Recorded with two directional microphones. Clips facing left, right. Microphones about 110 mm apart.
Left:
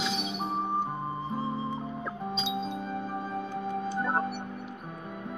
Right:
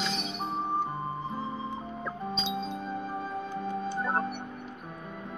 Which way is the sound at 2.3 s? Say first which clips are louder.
Left 1 dB; 5° left (ahead or behind).